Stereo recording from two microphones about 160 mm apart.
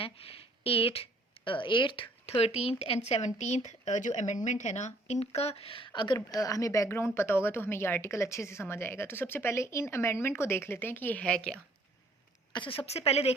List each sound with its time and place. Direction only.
0.0 s a woman's voice: 35° left (ahead or behind); by 11.5 s 5° left (ahead or behind)
12.8 s a woman's voice: 40° left (ahead or behind)